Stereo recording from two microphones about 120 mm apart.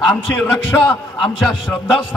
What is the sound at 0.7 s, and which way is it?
Speech, 15° left (ahead or behind).